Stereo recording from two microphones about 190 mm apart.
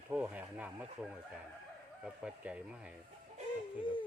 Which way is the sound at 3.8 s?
25° left (ahead or behind).